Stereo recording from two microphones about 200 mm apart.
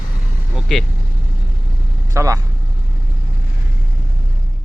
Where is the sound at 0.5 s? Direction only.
Centre (ahead or behind).